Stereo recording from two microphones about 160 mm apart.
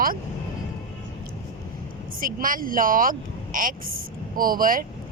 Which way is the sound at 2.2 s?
60° right (ahead or behind).